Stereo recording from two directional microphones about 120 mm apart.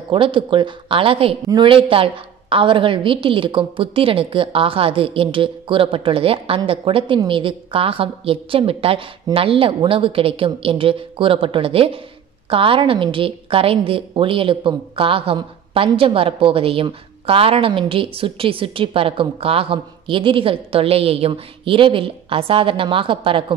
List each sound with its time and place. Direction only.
0.1 s a woman's voice: 45° right (ahead or behind)